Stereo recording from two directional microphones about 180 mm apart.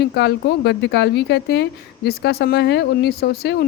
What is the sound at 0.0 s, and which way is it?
Speech, 65° left (ahead or behind).